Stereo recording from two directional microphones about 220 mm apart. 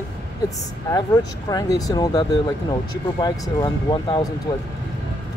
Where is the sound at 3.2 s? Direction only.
20° left (ahead or behind).